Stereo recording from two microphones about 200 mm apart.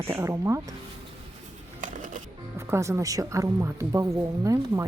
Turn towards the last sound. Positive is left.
turn(degrees=-15)  # may be behind; listen again after turning